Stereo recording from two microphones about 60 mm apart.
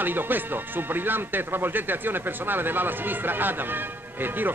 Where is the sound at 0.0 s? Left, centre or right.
Right.